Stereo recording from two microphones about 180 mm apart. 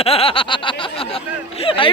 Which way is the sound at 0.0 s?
30° left (ahead or behind).